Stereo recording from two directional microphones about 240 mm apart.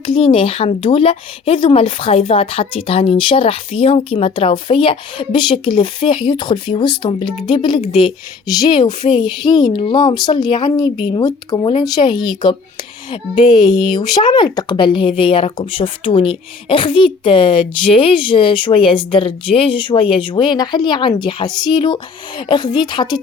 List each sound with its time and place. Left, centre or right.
0.0 s speech: left